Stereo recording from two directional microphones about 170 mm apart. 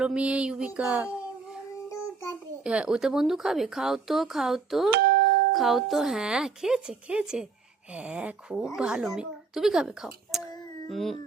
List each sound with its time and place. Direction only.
0.0 s a sound: 5° right (ahead or behind)
2.6 s a woman's voice: 5° right (ahead or behind)
4.9 s music: 60° right (ahead or behind)
5.5 s a woman's voice: centre (ahead or behind)
7.9 s a sound: 5° right (ahead or behind)
8.7 s a woman's voice: 5° right (ahead or behind)